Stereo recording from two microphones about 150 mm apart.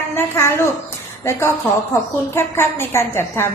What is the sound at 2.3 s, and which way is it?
A woman's voice, 15° left (ahead or behind).